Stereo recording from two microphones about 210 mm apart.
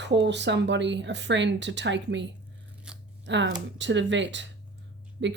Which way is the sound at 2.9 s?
5° right (ahead or behind).